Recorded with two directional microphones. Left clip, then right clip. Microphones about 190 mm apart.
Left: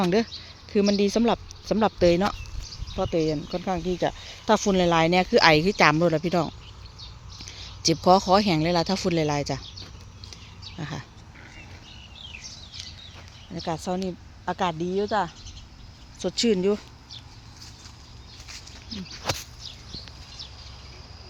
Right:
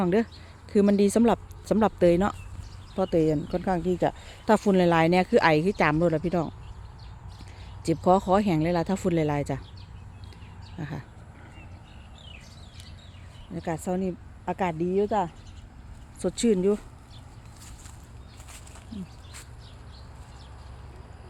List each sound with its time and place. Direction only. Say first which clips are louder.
0.0 s speech: left 2 dB; 5° right (ahead or behind)
2.9 s speech: right 1 dB; 20° right (ahead or behind); by 6.5 s centre (ahead or behind)
7.5 s speech: left 4 dB; centre (ahead or behind)
10.8 s a sound: left 2 dB; 5° right (ahead or behind)
13.5 s speech: left 2 dB; centre (ahead or behind)
13.7 s speech: even; 15° right (ahead or behind)
16.4 s speech: left 1 dB; 5° right (ahead or behind)